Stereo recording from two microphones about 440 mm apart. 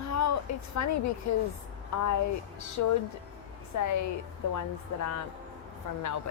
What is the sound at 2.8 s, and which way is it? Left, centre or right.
Speech, left.